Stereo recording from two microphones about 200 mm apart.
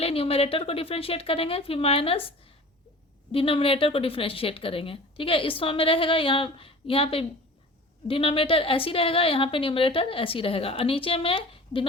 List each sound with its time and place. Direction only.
0.0 s a woman's voice: 30° left (ahead or behind)
3.3 s a woman's voice: 25° left (ahead or behind)